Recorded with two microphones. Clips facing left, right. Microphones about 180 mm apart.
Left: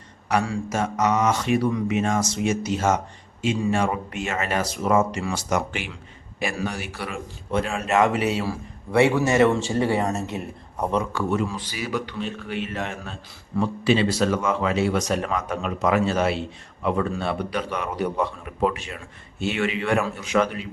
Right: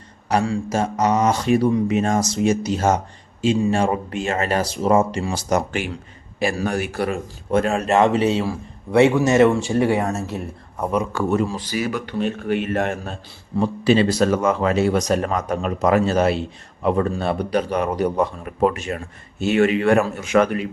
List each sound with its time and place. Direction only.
0.3 s speech: 35° right (ahead or behind)
6.7 s speech: 50° right (ahead or behind); by 10.1 s 15° right (ahead or behind)
10.1 s speech: centre (ahead or behind)
11.1 s a man's voice: 45° right (ahead or behind)